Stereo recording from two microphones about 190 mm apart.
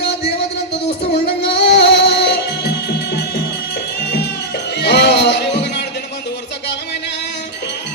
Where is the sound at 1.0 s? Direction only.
65° left (ahead or behind).